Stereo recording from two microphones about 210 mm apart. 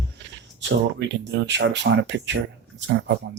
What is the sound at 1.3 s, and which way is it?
Speech, 60° right (ahead or behind).